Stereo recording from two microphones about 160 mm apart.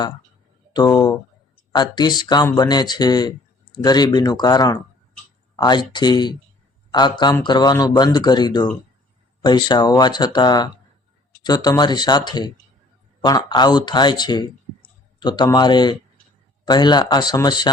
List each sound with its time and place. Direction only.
0.7 s speech: 25° left (ahead or behind)